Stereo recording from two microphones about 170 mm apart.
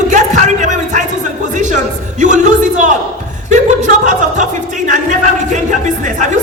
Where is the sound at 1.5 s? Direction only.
45° right (ahead or behind).